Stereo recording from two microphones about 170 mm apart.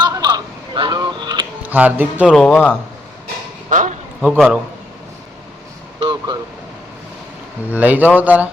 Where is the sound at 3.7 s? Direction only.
50° right (ahead or behind).